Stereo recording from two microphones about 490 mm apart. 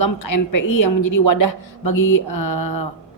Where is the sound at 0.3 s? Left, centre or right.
Left.